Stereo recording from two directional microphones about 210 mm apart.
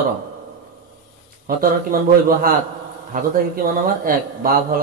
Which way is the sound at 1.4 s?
45° right (ahead or behind).